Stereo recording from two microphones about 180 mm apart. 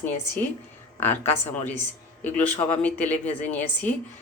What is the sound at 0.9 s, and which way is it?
Speech, 10° left (ahead or behind).